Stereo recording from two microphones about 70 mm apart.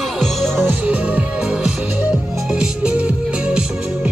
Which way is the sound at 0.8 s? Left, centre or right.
Centre.